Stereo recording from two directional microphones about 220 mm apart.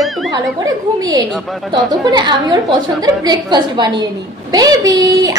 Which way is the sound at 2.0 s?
20° right (ahead or behind).